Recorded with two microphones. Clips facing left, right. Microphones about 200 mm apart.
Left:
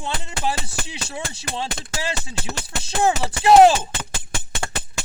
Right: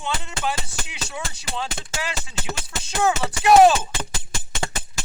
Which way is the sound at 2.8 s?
30° left (ahead or behind).